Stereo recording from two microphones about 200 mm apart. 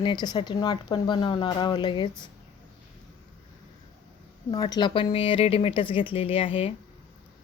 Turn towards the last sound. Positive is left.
turn(degrees=30)  # may be behind; listen again after turning